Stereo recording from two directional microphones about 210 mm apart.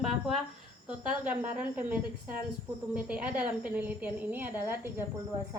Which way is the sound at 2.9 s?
5° right (ahead or behind).